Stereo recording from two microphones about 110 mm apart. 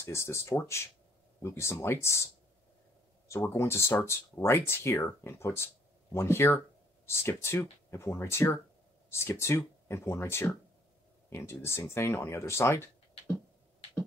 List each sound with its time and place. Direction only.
0.0 s speech: 25° left (ahead or behind)
3.3 s speech: 20° left (ahead or behind)